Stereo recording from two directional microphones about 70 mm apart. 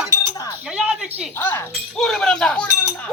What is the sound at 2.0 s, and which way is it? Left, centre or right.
Speech, centre.